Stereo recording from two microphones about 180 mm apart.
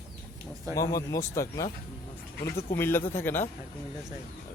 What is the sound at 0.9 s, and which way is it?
Speech, 15° left (ahead or behind).